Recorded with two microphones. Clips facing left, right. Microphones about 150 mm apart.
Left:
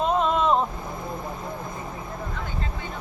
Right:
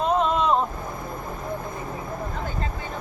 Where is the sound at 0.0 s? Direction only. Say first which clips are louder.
Even; centre (ahead or behind).